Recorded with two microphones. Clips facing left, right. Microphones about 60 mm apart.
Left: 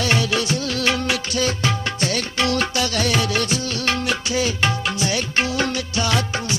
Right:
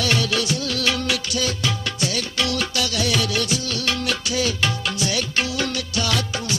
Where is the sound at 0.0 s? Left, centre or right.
Left.